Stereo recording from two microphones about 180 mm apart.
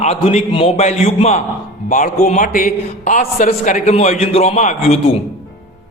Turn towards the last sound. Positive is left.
turn(degrees=35)  # may be behind; listen again after turning